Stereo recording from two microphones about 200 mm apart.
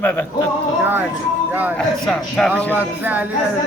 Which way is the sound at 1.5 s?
10° right (ahead or behind).